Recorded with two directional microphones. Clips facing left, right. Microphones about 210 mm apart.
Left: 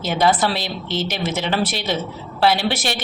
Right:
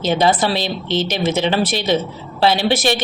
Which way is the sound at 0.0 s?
20° right (ahead or behind).